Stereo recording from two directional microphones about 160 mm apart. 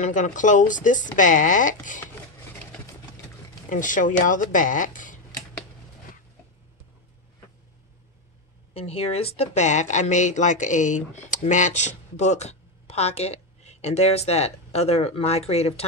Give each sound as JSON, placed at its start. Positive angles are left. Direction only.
{"t": 0.0, "sound": "speech", "side_deg": 50}
{"t": 3.7, "sound": "speech", "side_deg": 55}
{"t": 8.7, "sound": "speech", "side_deg": 40}